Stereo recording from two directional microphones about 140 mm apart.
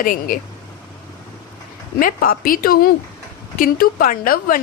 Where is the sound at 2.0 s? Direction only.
90° left.